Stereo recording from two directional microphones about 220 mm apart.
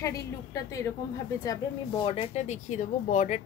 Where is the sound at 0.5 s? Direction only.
15° left (ahead or behind).